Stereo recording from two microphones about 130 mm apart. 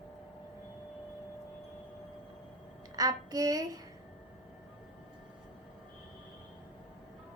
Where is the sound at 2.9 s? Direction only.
30° right (ahead or behind).